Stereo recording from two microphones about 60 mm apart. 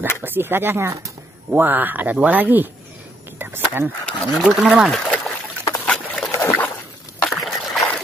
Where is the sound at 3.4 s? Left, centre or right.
Right.